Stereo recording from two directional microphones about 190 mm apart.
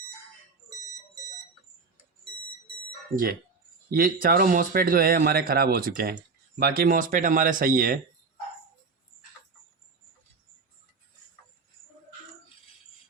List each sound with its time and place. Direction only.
3.8 s speech: 50° right (ahead or behind)